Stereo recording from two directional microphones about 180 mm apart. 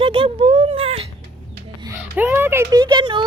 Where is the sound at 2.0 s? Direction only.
10° right (ahead or behind); by 3.2 s 25° right (ahead or behind).